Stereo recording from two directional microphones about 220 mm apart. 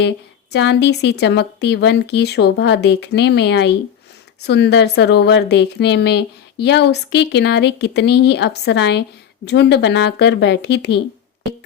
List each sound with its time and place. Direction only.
0.5 s a woman's voice: 50° left (ahead or behind)